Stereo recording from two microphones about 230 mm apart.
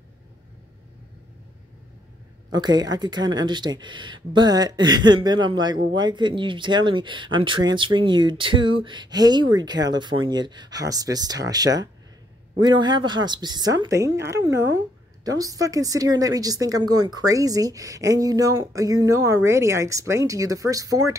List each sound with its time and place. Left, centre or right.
2.5 s a woman's voice: centre